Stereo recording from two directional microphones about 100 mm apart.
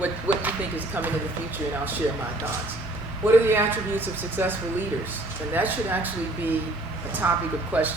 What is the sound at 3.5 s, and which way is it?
Speech, 20° right (ahead or behind).